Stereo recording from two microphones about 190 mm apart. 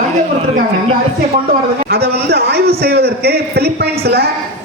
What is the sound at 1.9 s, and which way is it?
A man's voice, 55° right (ahead or behind).